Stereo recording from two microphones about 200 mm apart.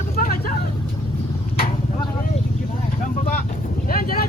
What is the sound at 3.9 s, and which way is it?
Speech, 45° left (ahead or behind).